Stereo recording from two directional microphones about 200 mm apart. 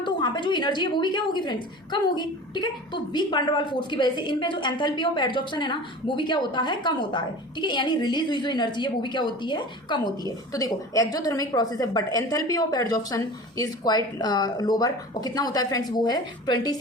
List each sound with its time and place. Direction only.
0.0 s a woman's voice: 20° left (ahead or behind)